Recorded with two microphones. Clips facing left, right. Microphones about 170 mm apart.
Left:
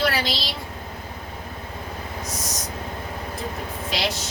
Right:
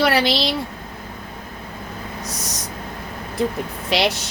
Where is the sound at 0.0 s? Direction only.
70° right (ahead or behind).